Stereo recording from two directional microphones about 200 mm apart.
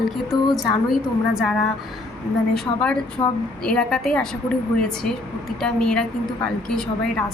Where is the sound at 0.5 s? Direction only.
Centre (ahead or behind).